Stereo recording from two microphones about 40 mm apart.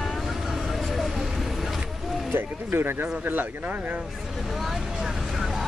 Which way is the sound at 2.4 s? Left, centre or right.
Right.